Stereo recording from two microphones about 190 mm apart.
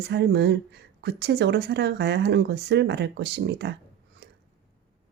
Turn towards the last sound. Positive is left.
turn(degrees=-65)  # may be behind; listen again after turning